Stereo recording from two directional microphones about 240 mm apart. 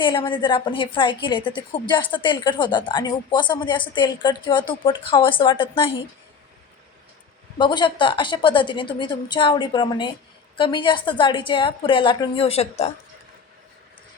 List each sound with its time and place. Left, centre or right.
0.0 s a woman's voice: centre
7.6 s a woman's voice: centre